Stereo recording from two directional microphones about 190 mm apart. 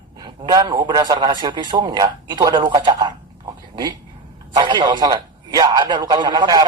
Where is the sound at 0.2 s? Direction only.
20° right (ahead or behind).